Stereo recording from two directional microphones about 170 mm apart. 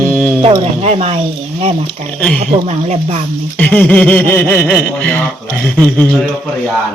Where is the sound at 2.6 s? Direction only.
40° right (ahead or behind).